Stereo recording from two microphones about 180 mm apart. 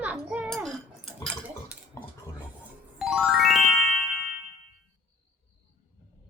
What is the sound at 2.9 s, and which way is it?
Music, centre (ahead or behind).